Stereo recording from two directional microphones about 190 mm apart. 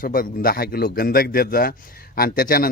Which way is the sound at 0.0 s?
50° left (ahead or behind).